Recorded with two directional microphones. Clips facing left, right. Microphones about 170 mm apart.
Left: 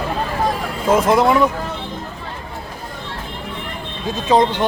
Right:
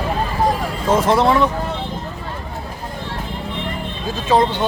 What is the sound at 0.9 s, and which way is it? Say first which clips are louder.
Speech: left 1 dB; 10° left (ahead or behind).